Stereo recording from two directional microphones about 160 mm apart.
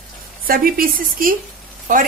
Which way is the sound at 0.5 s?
65° right (ahead or behind).